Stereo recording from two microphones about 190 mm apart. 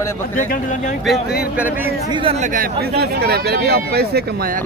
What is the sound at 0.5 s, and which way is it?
Speech, 40° left (ahead or behind).